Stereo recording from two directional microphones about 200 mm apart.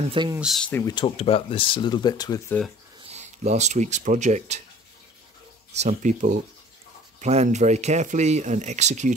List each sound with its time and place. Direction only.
0.1 s speech: 25° right (ahead or behind)
0.4 s speech: centre (ahead or behind)
0.9 s speech: 25° left (ahead or behind)
3.0 s speech: 35° right (ahead or behind)
5.8 s speech: 35° right (ahead or behind)